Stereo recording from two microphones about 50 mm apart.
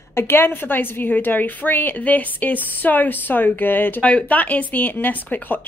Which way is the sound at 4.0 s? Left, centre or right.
Left.